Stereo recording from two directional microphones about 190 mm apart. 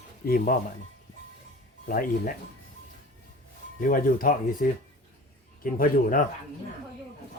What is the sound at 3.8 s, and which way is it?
Speech, 45° left (ahead or behind).